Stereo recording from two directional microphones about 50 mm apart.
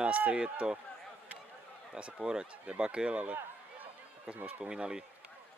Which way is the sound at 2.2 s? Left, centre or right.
Centre.